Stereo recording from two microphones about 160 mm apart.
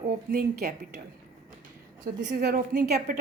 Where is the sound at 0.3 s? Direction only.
80° right.